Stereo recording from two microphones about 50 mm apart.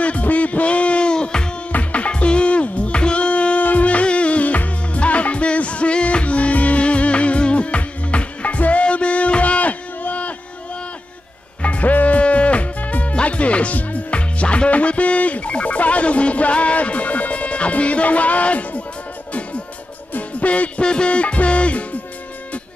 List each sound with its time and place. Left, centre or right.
0.0 s music: left
1.7 s music: left
11.6 s music: left
20.1 s music: left